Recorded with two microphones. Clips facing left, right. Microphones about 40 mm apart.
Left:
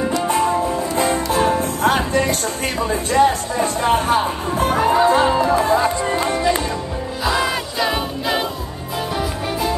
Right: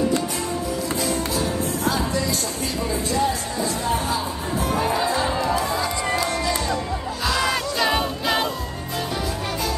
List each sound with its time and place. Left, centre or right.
0.3 s music: left
7.2 s music: centre